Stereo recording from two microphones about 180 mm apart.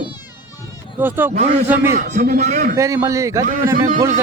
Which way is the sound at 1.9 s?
45° right (ahead or behind).